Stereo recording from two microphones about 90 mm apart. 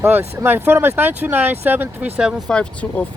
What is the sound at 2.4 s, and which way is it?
Speech, 10° left (ahead or behind).